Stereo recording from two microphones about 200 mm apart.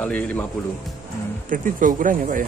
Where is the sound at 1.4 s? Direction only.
40° right (ahead or behind).